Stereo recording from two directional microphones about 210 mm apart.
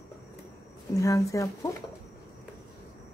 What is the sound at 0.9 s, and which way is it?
Speech, 15° left (ahead or behind).